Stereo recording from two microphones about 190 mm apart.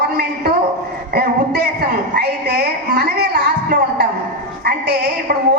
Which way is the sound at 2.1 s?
55° right (ahead or behind).